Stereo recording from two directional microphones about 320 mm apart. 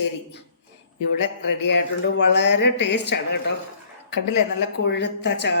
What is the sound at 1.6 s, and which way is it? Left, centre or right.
Speech, left.